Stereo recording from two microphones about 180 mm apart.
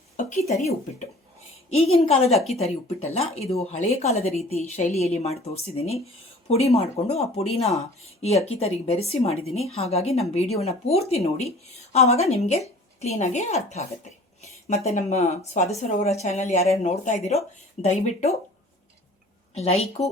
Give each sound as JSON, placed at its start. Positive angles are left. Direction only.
{"t": 0.2, "sound": "a woman's voice", "side_deg": 45}
{"t": 1.7, "sound": "a woman's voice", "side_deg": 35}
{"t": 14.8, "sound": "a woman's voice", "side_deg": 40}
{"t": 19.5, "sound": "a woman's voice", "side_deg": 35}